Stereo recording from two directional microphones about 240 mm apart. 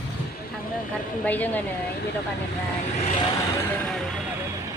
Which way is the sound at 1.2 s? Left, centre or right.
Centre.